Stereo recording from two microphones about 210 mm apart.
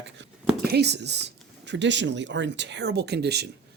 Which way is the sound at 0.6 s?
50° right (ahead or behind).